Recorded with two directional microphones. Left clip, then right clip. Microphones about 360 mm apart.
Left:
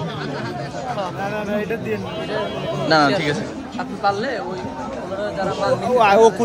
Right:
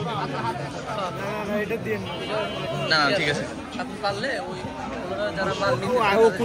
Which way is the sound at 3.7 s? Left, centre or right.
Left.